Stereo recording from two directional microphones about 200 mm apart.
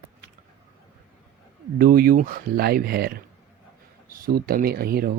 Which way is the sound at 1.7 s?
45° right (ahead or behind).